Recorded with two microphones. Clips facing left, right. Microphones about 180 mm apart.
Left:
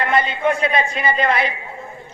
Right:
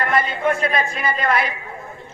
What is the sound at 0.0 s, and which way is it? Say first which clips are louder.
A man's voice: left 1 dB; 25° left (ahead or behind).